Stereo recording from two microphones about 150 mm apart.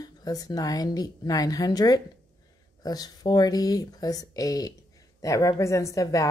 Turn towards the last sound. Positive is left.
turn(degrees=20)  # may be behind; listen again after turning